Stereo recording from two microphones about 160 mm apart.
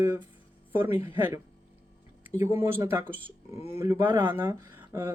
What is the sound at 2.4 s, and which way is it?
Speech, 15° right (ahead or behind).